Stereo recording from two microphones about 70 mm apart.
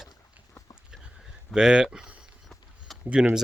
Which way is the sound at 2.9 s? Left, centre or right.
Centre.